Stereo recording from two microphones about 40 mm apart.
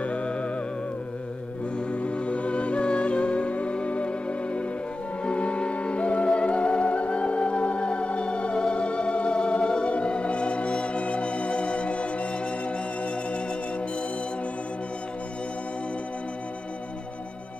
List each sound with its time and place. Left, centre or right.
0.0 s music: left
1.9 s music: left